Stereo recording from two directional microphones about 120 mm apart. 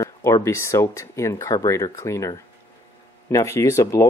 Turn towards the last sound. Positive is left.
turn(degrees=25)  # may be behind; listen again after turning